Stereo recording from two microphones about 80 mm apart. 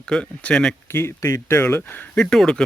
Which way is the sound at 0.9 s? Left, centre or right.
Left.